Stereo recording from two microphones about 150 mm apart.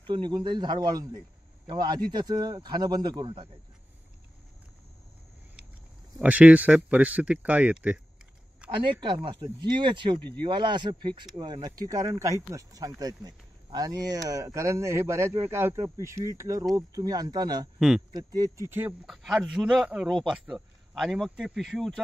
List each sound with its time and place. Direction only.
0.0 s speech: 30° right (ahead or behind)
6.2 s speech: 10° right (ahead or behind)
8.6 s speech: 35° right (ahead or behind)
17.7 s speech: 5° right (ahead or behind)
18.1 s speech: 25° right (ahead or behind)
18.7 s speech: 15° right (ahead or behind)
19.0 s speech: 5° right (ahead or behind)